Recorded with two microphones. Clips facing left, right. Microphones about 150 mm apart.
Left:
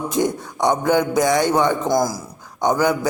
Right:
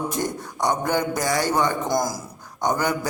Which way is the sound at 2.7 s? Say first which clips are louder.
Left 5 dB; 10° left (ahead or behind).